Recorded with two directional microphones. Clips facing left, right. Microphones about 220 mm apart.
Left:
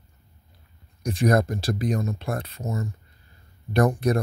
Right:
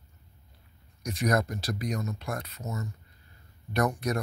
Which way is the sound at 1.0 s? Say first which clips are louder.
Left 6 dB; 30° left (ahead or behind).